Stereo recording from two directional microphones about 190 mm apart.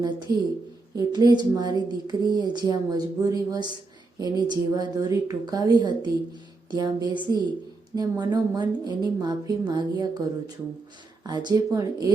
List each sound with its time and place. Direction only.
0.3 s a woman's voice: 55° right (ahead or behind)
0.9 s a woman's voice: 20° right (ahead or behind)